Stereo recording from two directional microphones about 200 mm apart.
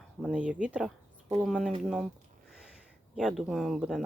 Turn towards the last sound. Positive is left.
turn(degrees=-5)  # may be behind; listen again after turning